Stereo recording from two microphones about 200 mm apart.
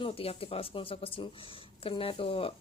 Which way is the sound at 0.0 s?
30° left (ahead or behind).